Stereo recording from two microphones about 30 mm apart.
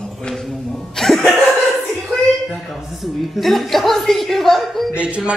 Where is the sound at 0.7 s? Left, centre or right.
Centre.